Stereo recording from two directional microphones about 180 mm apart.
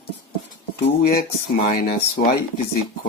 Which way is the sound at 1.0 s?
55° left (ahead or behind).